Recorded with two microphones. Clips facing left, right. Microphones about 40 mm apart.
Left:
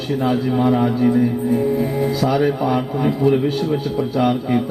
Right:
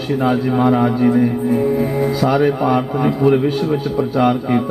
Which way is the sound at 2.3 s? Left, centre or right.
Centre.